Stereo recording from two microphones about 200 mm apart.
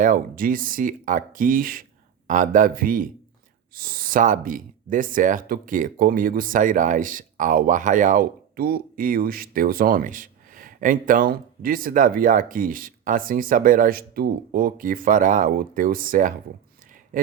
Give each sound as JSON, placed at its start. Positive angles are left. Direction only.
{"t": 0.0, "sound": "speech", "side_deg": -45}